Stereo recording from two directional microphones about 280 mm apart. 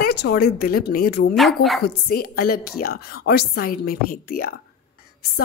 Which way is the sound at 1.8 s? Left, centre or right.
Left.